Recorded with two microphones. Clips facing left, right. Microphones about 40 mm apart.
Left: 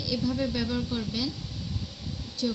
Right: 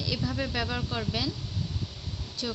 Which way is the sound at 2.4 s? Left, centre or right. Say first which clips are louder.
Left 4 dB; right.